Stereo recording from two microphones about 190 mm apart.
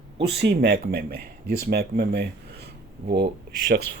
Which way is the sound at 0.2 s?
65° right (ahead or behind).